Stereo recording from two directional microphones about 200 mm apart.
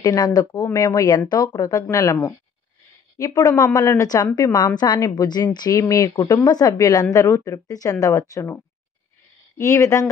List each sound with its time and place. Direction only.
0.0 s a woman's voice: 20° left (ahead or behind)